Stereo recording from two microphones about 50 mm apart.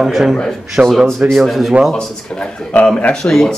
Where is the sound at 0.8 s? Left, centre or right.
Right.